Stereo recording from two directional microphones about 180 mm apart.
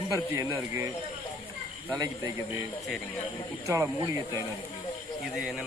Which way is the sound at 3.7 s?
15° right (ahead or behind).